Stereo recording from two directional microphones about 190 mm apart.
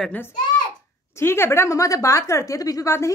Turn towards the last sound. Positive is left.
turn(degrees=15)  # may be behind; listen again after turning